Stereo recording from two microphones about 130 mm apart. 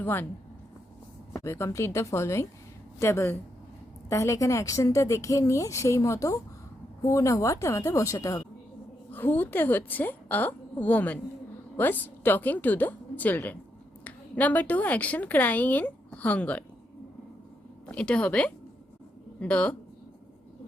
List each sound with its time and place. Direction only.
0.0 s speech: 15° left (ahead or behind)
1.3 s a woman's voice: 20° left (ahead or behind)
9.1 s a woman's voice: 15° left (ahead or behind)
17.8 s a woman's voice: 10° left (ahead or behind)